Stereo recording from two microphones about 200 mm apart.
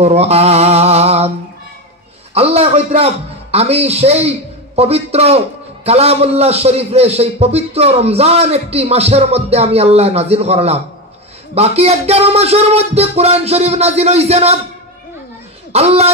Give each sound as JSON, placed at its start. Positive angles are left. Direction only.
{"t": 0.0, "sound": "a man's voice", "side_deg": -30}
{"t": 2.3, "sound": "a man's voice", "side_deg": -30}
{"t": 15.7, "sound": "a man's voice", "side_deg": -30}